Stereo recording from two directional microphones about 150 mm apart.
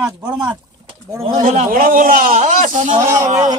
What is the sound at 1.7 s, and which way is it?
A man's voice, 65° right (ahead or behind).